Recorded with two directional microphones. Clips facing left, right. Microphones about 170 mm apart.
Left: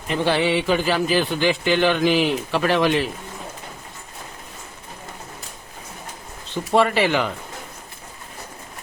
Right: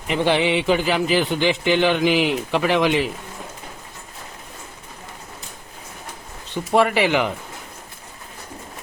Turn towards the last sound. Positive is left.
turn(degrees=-15)  # may be behind; listen again after turning